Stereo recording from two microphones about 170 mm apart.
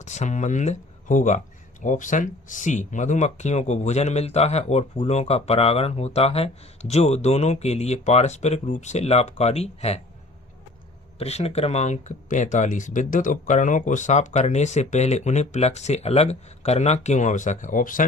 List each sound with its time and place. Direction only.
0.0 s speech: 45° left (ahead or behind)
11.2 s speech: 40° left (ahead or behind)